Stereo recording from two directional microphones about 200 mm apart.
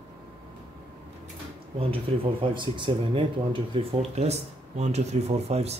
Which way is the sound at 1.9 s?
25° right (ahead or behind).